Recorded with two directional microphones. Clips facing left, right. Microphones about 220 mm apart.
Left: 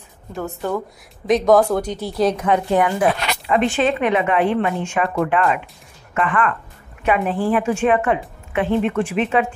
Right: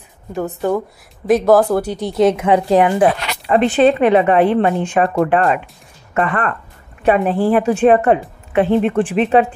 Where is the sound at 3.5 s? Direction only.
35° right (ahead or behind).